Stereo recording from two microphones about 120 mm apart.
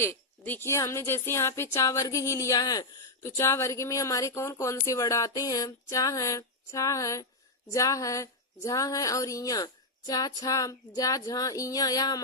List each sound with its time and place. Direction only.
0.0 s speech: 20° left (ahead or behind)
3.2 s speech: 20° left (ahead or behind)
10.1 s female singing: 30° left (ahead or behind)